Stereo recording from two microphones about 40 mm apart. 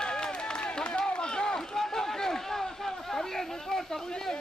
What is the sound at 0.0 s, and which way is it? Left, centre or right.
Run, left.